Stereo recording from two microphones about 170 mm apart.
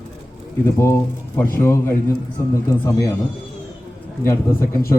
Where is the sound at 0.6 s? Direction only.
15° left (ahead or behind).